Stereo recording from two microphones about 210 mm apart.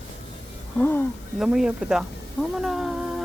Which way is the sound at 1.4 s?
5° right (ahead or behind).